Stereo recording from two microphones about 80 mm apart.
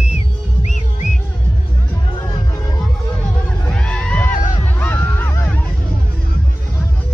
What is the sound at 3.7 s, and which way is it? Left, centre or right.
Music, centre.